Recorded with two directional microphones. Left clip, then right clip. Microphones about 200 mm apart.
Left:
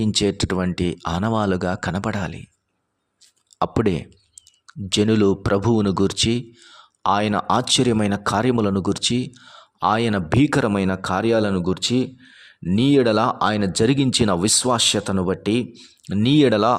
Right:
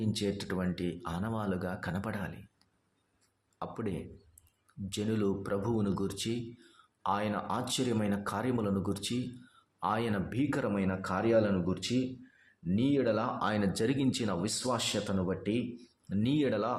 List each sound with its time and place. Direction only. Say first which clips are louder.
0.0 s speech: left 14 dB; 55° left (ahead or behind)
3.6 s speech: left 17 dB; 50° left (ahead or behind)